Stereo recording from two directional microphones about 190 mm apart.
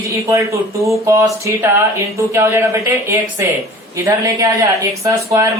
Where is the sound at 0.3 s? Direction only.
15° right (ahead or behind).